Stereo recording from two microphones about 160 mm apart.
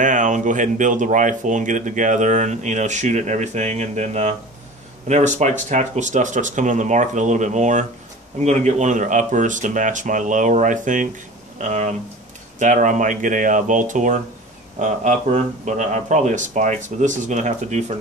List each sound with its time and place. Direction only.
0.0 s speech: 50° right (ahead or behind)